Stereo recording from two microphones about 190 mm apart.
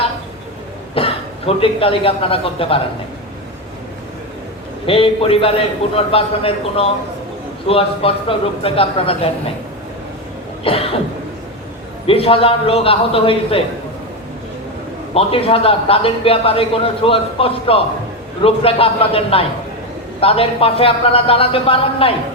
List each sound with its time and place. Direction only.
0.9 s a man's voice: 30° left (ahead or behind)
4.9 s a man's voice: 30° left (ahead or behind)
10.6 s cough: 30° left (ahead or behind)
12.0 s a man's voice: 30° left (ahead or behind)
15.1 s a man's voice: 30° left (ahead or behind)